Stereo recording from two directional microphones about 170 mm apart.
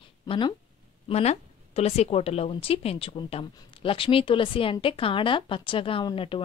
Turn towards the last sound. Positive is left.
turn(degrees=30)  # may be behind; listen again after turning